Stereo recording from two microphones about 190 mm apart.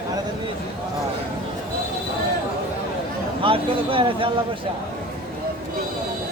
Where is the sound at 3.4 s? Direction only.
25° right (ahead or behind).